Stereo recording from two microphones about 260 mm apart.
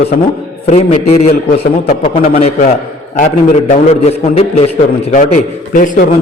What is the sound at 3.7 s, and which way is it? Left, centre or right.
A man's voice, left.